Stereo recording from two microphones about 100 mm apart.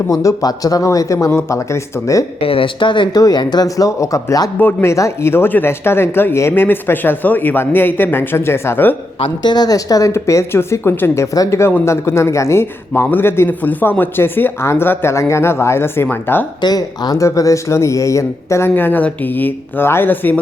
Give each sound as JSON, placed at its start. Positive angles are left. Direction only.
{"t": 0.1, "sound": "a woman's voice", "side_deg": 35}
{"t": 2.4, "sound": "speech", "side_deg": 65}
{"t": 3.2, "sound": "a woman's voice", "side_deg": 40}
{"t": 9.4, "sound": "a woman's voice", "side_deg": 45}
{"t": 16.6, "sound": "a woman's voice", "side_deg": 45}
{"t": 18.7, "sound": "a man's voice", "side_deg": 20}